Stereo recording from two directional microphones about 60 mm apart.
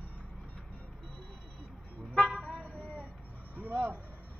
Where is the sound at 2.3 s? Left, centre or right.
Right.